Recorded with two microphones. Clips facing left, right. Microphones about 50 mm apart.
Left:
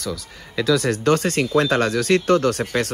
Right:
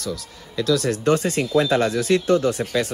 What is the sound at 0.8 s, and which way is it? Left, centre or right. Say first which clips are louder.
A man's voice: left 1 dB; left.